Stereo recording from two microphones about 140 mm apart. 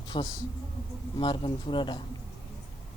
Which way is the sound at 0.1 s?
40° left (ahead or behind).